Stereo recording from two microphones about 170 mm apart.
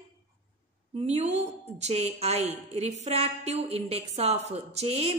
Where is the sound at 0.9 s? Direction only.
40° right (ahead or behind).